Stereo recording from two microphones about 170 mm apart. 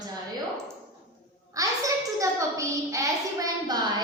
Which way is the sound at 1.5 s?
20° right (ahead or behind).